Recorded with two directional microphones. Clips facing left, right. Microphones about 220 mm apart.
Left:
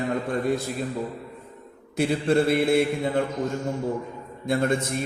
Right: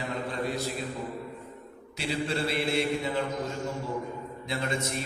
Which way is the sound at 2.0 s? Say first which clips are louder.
Left 9 dB; 50° left (ahead or behind).